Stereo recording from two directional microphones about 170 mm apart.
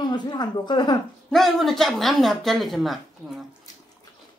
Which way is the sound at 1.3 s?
Centre (ahead or behind).